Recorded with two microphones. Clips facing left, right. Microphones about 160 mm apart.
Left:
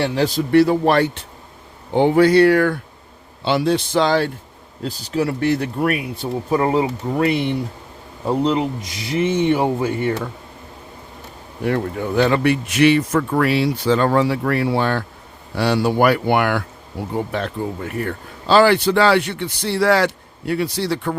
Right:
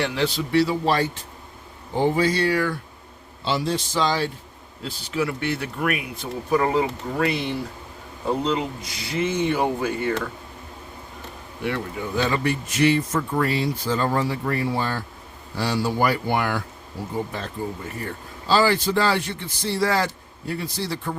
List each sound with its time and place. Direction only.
0.0 s a man's voice: 40° left (ahead or behind); by 4.3 s 60° left (ahead or behind)
4.8 s speech: 40° left (ahead or behind)
8.4 s speech: 25° left (ahead or behind)
11.6 s speech: 50° left (ahead or behind); by 21.2 s 70° left (ahead or behind)